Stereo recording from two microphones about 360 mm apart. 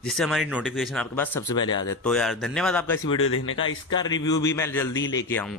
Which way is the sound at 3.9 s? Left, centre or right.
Centre.